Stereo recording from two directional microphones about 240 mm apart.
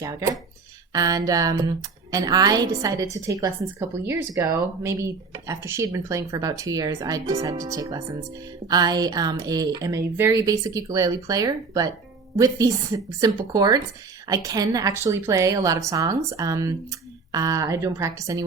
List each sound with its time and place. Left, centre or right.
0.0 s a woman's voice: centre